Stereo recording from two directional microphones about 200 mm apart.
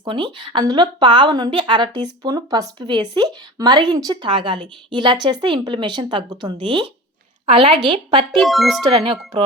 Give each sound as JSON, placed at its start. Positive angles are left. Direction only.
{"t": 0.0, "sound": "speech", "side_deg": -25}
{"t": 8.4, "sound": "speech", "side_deg": 0}